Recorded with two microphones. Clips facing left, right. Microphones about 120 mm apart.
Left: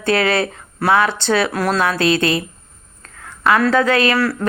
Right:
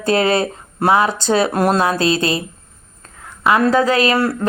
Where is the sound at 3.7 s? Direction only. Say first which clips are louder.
Right 1 dB; 30° right (ahead or behind).